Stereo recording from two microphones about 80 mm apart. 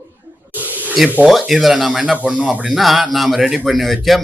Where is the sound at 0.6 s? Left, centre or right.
Right.